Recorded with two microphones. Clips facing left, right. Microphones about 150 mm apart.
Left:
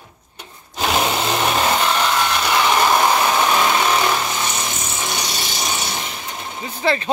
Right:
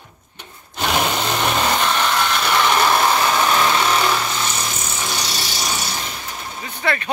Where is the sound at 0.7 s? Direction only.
5° left (ahead or behind).